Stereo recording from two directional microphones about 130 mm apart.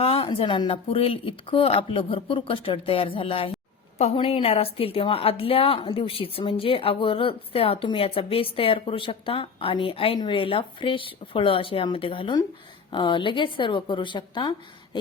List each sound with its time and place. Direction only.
0.0 s a woman's voice: 45° left (ahead or behind)